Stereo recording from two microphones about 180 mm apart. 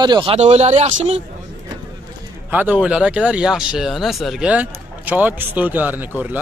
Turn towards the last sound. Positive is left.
turn(degrees=-10)  # may be behind; listen again after turning